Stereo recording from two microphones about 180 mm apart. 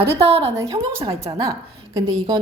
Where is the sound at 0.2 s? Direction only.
35° right (ahead or behind).